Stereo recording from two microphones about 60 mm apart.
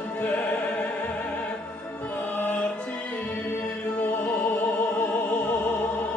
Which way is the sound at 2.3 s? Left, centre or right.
Left.